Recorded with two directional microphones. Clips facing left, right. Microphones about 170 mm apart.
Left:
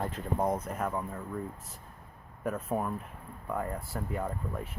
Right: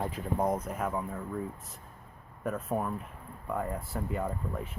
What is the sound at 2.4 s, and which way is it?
Speech, centre (ahead or behind).